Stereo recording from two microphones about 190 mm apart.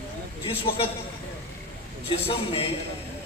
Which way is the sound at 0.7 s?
30° left (ahead or behind).